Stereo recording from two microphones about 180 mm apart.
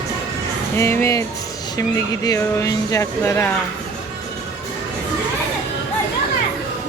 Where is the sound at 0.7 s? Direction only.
15° left (ahead or behind).